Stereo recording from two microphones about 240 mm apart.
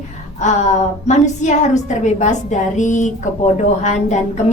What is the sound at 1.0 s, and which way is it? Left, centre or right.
A woman's voice, left.